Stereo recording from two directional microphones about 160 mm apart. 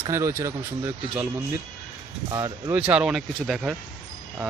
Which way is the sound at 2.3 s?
20° right (ahead or behind).